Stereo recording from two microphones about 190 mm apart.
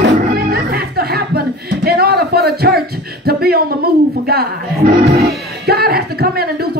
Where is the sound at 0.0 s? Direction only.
55° right (ahead or behind).